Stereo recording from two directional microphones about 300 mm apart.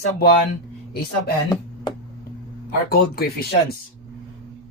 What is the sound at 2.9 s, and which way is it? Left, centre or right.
Speech, left.